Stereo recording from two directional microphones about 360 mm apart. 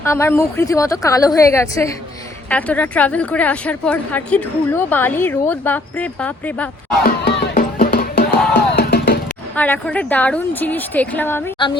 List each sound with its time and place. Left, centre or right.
0.0 s a woman's voice: centre
7.0 s music: left
9.6 s speech: centre